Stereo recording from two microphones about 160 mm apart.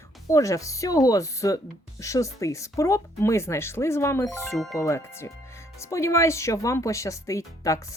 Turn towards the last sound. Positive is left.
turn(degrees=20)  # may be behind; listen again after turning